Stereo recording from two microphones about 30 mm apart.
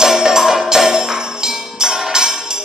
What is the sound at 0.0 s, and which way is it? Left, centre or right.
Music, centre.